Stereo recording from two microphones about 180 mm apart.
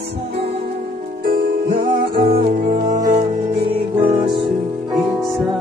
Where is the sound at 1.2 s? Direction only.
55° right (ahead or behind).